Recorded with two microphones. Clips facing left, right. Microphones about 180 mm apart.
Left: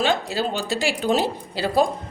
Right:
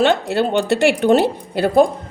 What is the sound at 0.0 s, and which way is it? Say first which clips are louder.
Speech: right 6 dB; 65° right (ahead or behind).